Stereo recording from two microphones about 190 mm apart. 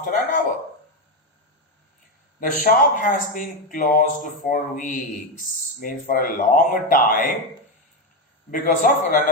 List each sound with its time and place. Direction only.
0.0 s a man's voice: 45° left (ahead or behind)
2.4 s a man's voice: 45° left (ahead or behind)
8.4 s a man's voice: 45° left (ahead or behind)